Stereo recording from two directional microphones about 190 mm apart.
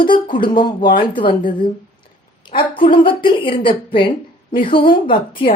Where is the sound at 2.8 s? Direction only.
25° left (ahead or behind).